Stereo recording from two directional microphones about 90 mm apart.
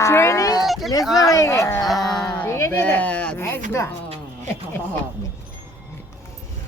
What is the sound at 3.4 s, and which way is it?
Music, 30° left (ahead or behind).